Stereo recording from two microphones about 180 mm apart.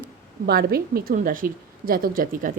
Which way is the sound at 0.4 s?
60° right (ahead or behind).